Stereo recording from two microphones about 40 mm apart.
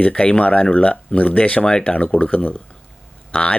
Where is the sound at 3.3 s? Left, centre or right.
Left.